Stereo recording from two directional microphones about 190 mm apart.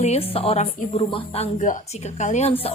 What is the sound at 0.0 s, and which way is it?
A woman's voice, 35° left (ahead or behind).